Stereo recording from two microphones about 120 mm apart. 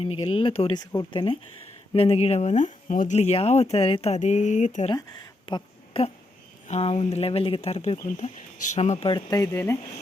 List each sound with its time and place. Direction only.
0.2 s speech: 45° left (ahead or behind)
1.9 s speech: 55° left (ahead or behind); by 4.9 s 90° left
5.5 s a sound: 45° left (ahead or behind)
6.7 s speech: 55° left (ahead or behind)
8.1 s speech: 80° left
9.0 s speech: 35° left (ahead or behind)